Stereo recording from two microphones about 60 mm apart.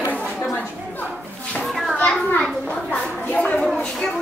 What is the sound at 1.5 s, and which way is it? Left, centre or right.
Children playing, centre.